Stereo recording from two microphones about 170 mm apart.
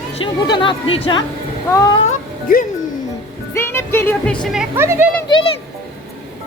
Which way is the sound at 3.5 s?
15° left (ahead or behind).